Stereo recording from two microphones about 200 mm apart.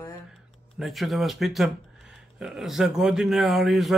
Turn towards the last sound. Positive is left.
turn(degrees=0)  # may be behind; listen again after turning